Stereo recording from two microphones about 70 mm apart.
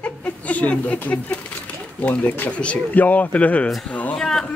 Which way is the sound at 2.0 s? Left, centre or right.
Centre.